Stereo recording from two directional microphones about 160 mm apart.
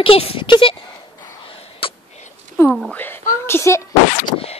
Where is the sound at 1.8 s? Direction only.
35° left (ahead or behind).